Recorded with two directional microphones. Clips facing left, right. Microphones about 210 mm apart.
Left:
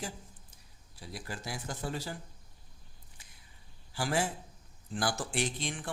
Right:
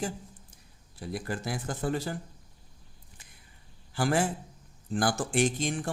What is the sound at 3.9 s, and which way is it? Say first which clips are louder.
Speech: right 5 dB; 55° right (ahead or behind).